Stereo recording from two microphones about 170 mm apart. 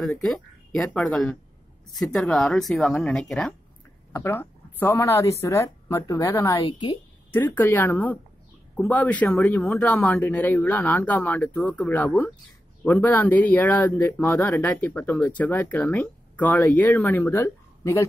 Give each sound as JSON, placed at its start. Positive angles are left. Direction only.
{"t": 0.0, "sound": "speech", "side_deg": 0}
{"t": 4.1, "sound": "a woman's voice", "side_deg": 15}
{"t": 7.3, "sound": "speech", "side_deg": 10}